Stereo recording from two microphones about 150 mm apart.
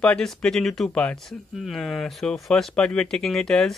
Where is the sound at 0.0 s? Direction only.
5° left (ahead or behind).